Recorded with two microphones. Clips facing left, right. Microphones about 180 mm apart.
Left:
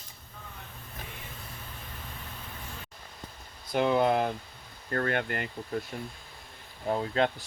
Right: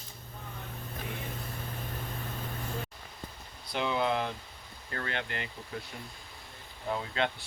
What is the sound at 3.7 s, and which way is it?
Speech, 50° left (ahead or behind).